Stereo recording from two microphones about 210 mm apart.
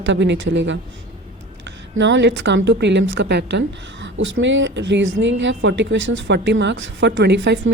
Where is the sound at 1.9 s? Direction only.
60° right (ahead or behind).